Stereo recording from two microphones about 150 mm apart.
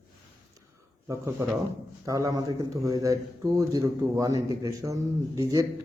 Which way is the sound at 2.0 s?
20° right (ahead or behind).